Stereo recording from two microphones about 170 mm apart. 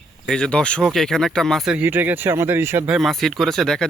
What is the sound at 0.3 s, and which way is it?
Speech, 5° left (ahead or behind).